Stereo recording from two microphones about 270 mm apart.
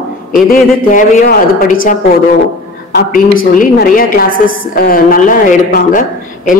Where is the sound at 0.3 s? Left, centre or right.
Left.